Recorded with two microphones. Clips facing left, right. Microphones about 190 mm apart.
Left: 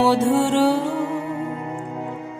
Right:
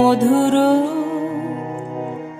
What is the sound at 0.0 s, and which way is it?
Music, 65° right (ahead or behind).